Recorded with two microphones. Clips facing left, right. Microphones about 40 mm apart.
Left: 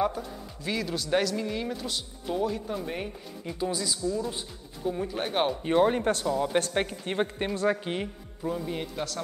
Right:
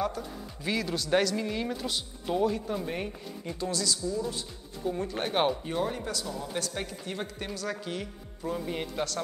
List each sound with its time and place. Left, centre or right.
0.2 s speech: centre
3.5 s speech: centre
4.8 s speech: centre
5.6 s speech: left
8.5 s speech: centre